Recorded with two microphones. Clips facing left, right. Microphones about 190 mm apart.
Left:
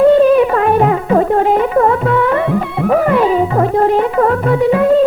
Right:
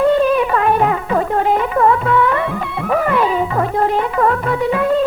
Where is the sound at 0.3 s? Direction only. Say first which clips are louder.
Left 4 dB; 40° left (ahead or behind).